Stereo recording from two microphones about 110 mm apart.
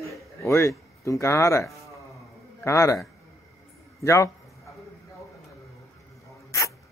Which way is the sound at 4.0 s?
25° left (ahead or behind).